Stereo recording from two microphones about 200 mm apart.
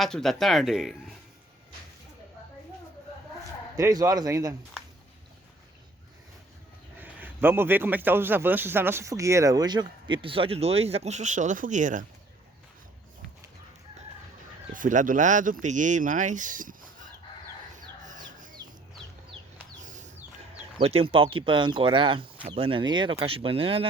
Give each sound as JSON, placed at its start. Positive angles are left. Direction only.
{"t": 0.0, "sound": "speech", "side_deg": 0}
{"t": 3.8, "sound": "a man's voice", "side_deg": -15}
{"t": 7.0, "sound": "a man's voice", "side_deg": -10}
{"t": 14.7, "sound": "speech", "side_deg": -40}
{"t": 17.7, "sound": "chicken", "side_deg": -40}
{"t": 19.8, "sound": "a sound", "side_deg": -40}
{"t": 20.7, "sound": "speech", "side_deg": -30}